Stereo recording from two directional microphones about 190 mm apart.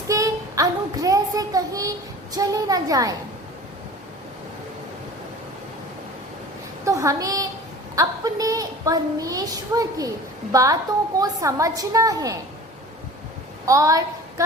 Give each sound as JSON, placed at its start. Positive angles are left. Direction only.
{"t": 0.1, "sound": "child singing", "side_deg": -15}
{"t": 2.3, "sound": "a woman's voice", "side_deg": -20}
{"t": 6.8, "sound": "a woman's voice", "side_deg": -15}
{"t": 13.7, "sound": "a woman's voice", "side_deg": -15}